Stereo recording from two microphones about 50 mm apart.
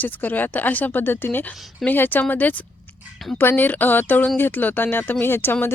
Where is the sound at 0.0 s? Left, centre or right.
Left.